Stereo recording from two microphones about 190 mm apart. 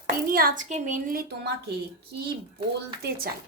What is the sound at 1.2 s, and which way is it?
A woman's voice, 60° right (ahead or behind).